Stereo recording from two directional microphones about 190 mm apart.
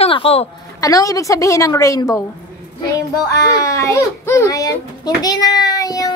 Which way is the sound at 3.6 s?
15° left (ahead or behind).